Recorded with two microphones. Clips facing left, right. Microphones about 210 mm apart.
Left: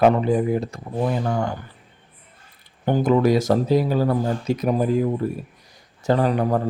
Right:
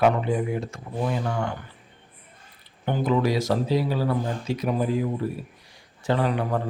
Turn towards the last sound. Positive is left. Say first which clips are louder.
# left 5 dB
turn(degrees=40)  # may be behind; listen again after turning